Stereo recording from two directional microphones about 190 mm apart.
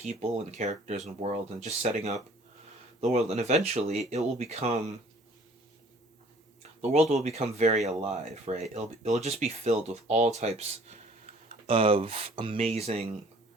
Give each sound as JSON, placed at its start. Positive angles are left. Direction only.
{"t": 0.1, "sound": "speech", "side_deg": -35}
{"t": 6.6, "sound": "speech", "side_deg": -35}